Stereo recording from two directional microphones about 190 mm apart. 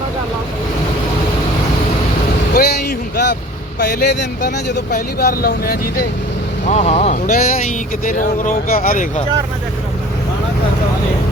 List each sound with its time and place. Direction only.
2.6 s vehicle: 60° left (ahead or behind)
3.8 s speech: 55° left (ahead or behind)
6.7 s speech: 35° left (ahead or behind)